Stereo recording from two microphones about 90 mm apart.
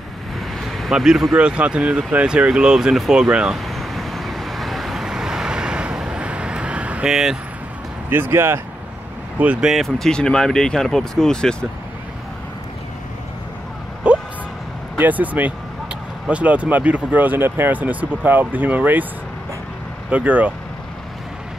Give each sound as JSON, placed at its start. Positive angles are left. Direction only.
{"t": 0.6, "sound": "a sound", "side_deg": 0}
{"t": 7.1, "sound": "speech", "side_deg": -5}
{"t": 8.1, "sound": "speech", "side_deg": -25}
{"t": 9.4, "sound": "speech", "side_deg": -15}
{"t": 9.7, "sound": "speech", "side_deg": 0}
{"t": 14.0, "sound": "vehicle", "side_deg": -10}
{"t": 15.0, "sound": "speech", "side_deg": -20}
{"t": 20.1, "sound": "speech", "side_deg": -15}